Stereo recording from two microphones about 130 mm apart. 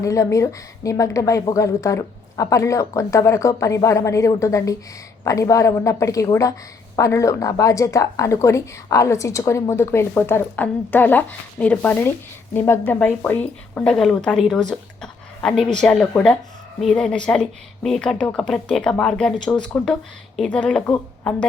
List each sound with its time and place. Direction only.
0.0 s a woman's voice: 25° left (ahead or behind); by 21.4 s 5° left (ahead or behind)